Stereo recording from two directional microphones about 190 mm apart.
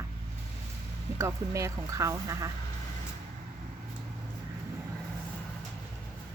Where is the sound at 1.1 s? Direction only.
15° right (ahead or behind).